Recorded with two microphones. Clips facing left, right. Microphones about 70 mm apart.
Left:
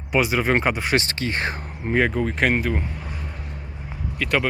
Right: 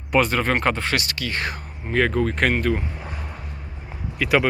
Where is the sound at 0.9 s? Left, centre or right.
Left.